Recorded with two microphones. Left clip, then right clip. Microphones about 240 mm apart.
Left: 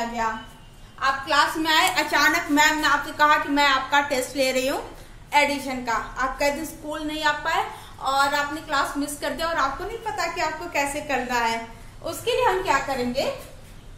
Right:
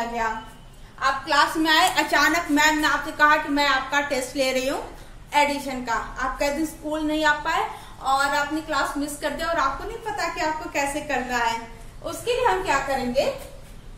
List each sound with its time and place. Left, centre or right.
0.9 s a woman's voice: centre
12.6 s a woman's voice: centre